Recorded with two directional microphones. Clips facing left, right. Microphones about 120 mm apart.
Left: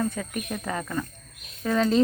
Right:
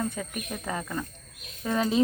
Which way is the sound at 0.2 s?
15° right (ahead or behind).